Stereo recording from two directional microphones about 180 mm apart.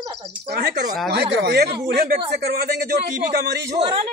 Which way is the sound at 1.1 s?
65° right (ahead or behind).